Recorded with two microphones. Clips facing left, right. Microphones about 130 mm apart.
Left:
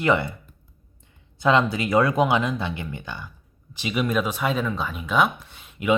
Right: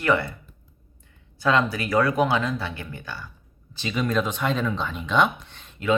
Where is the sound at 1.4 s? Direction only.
20° left (ahead or behind).